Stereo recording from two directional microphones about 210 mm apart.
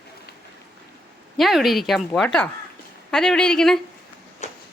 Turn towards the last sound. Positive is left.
turn(degrees=35)  # may be behind; listen again after turning